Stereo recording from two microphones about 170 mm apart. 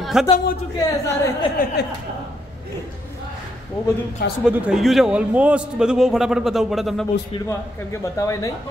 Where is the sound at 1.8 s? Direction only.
80° left.